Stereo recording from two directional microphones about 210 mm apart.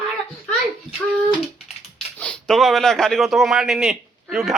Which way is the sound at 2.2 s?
5° left (ahead or behind).